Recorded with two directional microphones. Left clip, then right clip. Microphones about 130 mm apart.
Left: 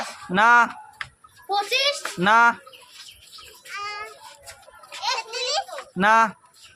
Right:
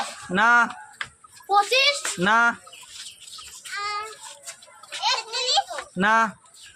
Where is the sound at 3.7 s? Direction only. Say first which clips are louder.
Right 3 dB; 10° left (ahead or behind).